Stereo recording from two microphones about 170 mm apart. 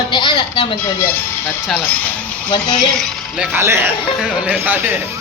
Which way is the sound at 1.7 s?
10° left (ahead or behind).